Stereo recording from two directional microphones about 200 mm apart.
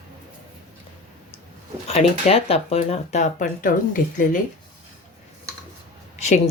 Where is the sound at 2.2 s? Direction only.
30° left (ahead or behind).